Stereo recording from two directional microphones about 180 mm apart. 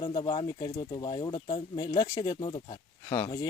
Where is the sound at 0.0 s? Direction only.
25° left (ahead or behind).